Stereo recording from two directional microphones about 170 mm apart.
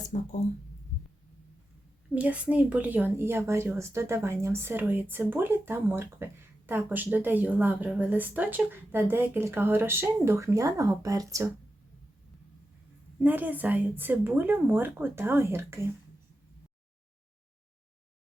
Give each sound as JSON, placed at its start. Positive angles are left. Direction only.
{"t": 0.1, "sound": "speech", "side_deg": 45}
{"t": 2.1, "sound": "a woman's voice", "side_deg": -5}
{"t": 13.1, "sound": "a woman's voice", "side_deg": -10}